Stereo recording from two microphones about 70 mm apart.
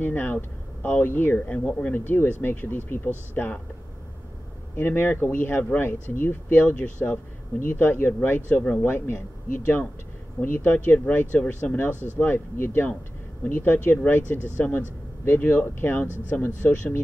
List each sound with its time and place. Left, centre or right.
0.0 s speech: left
4.7 s speech: left
10.4 s speech: left
11.9 s speech: right
12.2 s speech: left